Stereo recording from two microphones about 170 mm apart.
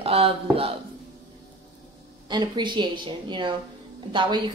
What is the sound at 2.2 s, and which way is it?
Speech, 25° right (ahead or behind).